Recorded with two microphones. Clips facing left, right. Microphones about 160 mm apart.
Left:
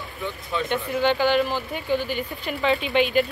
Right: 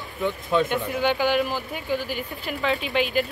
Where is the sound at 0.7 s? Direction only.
10° right (ahead or behind).